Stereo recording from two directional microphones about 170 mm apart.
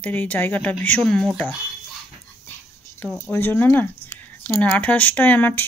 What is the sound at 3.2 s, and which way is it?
Speech, 15° left (ahead or behind).